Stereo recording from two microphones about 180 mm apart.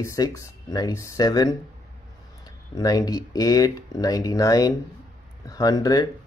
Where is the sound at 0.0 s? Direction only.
15° left (ahead or behind).